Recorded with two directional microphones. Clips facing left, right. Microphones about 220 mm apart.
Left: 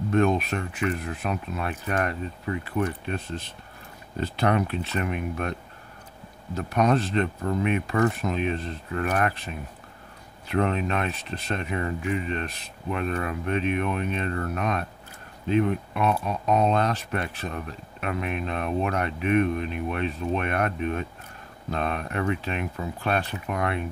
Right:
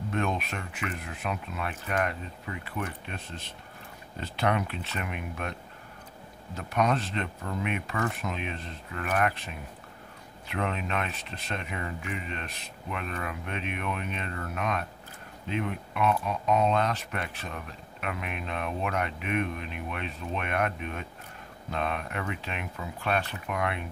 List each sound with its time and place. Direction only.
0.1 s speech: 40° left (ahead or behind)
10.5 s speech: 40° left (ahead or behind)